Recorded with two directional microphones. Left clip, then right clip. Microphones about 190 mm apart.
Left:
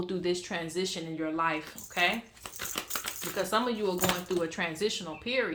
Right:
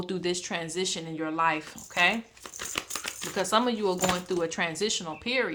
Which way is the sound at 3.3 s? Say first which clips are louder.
Right 4 dB; 40° right (ahead or behind).